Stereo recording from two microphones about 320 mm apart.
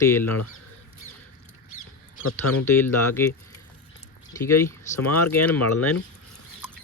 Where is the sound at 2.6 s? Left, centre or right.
Centre.